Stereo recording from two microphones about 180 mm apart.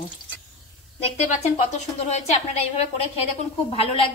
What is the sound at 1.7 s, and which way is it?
Speech, 40° left (ahead or behind).